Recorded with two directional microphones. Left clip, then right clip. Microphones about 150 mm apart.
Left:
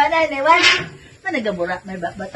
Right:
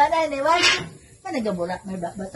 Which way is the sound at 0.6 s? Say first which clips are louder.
Left 5 dB; 10° left (ahead or behind).